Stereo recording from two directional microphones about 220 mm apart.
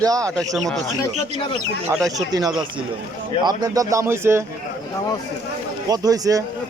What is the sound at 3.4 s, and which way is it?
Speech, 15° right (ahead or behind).